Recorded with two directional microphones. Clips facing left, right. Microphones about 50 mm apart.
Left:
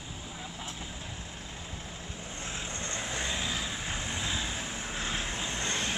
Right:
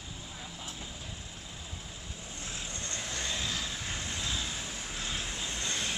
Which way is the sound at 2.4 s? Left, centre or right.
Left.